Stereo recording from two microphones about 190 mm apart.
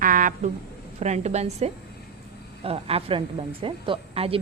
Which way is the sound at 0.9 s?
35° right (ahead or behind).